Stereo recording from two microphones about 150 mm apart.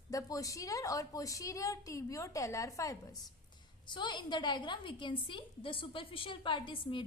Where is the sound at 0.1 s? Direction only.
20° left (ahead or behind).